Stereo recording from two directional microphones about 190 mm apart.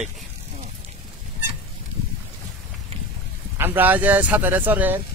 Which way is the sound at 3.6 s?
10° right (ahead or behind).